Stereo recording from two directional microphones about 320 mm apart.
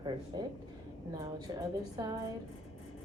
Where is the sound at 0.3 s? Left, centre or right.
Centre.